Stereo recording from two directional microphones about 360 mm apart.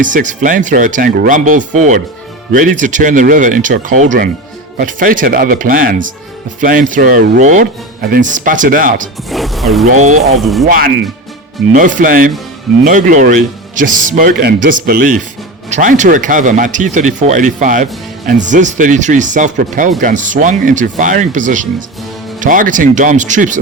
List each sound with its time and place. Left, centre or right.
0.0 s speech: right
9.3 s speech: centre
10.0 s speech: centre
10.3 s speech: centre
10.7 s speech: right